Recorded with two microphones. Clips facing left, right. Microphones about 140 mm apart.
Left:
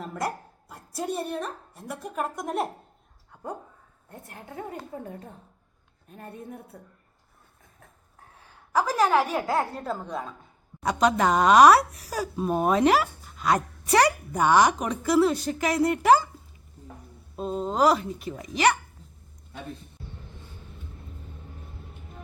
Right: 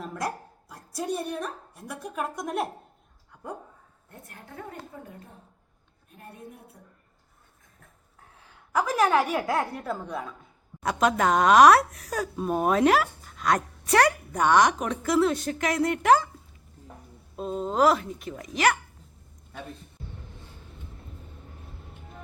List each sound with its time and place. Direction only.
0.1 s a sound: 5° left (ahead or behind)
1.9 s speech: 5° left (ahead or behind)
8.8 s a woman's voice: 15° left (ahead or behind)
10.8 s speech: centre (ahead or behind)
17.3 s speech: centre (ahead or behind)